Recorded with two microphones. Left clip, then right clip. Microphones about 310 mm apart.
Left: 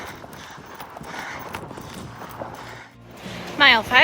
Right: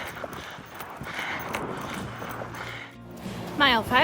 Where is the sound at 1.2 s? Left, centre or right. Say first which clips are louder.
Right 3 dB; centre.